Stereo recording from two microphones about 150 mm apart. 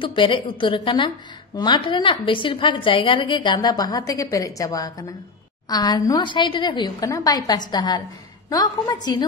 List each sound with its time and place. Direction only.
0.0 s a woman's voice: 35° left (ahead or behind)